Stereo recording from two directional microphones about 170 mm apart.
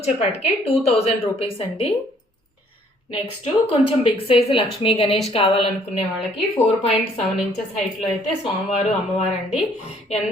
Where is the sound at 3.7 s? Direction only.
30° left (ahead or behind).